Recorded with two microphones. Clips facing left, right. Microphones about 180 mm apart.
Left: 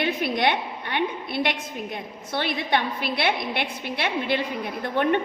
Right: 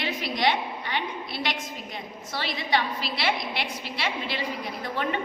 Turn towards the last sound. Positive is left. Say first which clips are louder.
# left 6 dB
turn(degrees=55)  # may be behind; listen again after turning